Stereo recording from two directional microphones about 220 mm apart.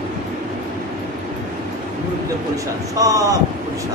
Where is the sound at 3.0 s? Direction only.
15° right (ahead or behind).